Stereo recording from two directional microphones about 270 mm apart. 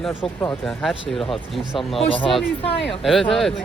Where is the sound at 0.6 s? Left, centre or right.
Centre.